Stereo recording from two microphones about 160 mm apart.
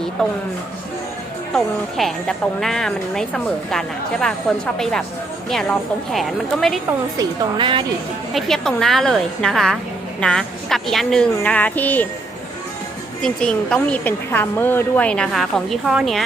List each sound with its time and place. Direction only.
0.2 s a woman's voice: 5° left (ahead or behind)
1.5 s a woman's voice: centre (ahead or behind)
6.1 s a woman's voice: centre (ahead or behind)
7.2 s a woman's voice: 30° right (ahead or behind)
8.3 s a woman's voice: centre (ahead or behind)
13.2 s a woman's voice: 5° left (ahead or behind)